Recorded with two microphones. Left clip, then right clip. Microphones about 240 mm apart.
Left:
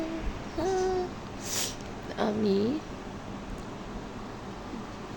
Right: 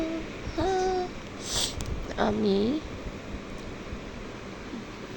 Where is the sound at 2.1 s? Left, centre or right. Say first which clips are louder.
Right 2 dB; centre.